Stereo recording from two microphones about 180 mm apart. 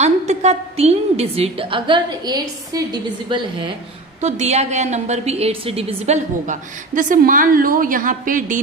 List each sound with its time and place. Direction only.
0.0 s a woman's voice: 40° right (ahead or behind)
4.2 s a woman's voice: 40° right (ahead or behind)